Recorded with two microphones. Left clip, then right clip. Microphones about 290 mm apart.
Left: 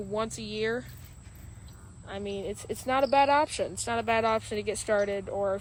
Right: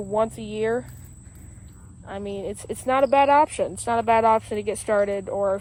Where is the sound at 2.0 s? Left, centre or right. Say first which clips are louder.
Right 4 dB; right.